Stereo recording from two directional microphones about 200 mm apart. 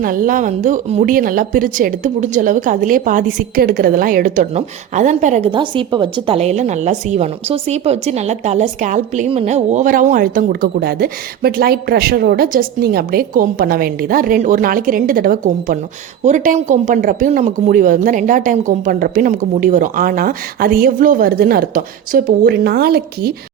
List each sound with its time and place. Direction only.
0.0 s speech: 45° right (ahead or behind)
5.5 s speech: 25° right (ahead or behind); by 23.3 s 50° right (ahead or behind)